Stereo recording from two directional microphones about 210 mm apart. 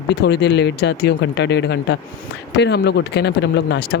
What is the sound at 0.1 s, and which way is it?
Speech, 55° left (ahead or behind).